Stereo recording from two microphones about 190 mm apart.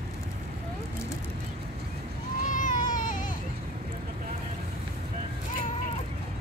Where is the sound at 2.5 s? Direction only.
45° left (ahead or behind).